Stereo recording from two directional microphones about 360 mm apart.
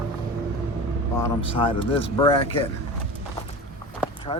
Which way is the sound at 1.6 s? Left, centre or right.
Centre.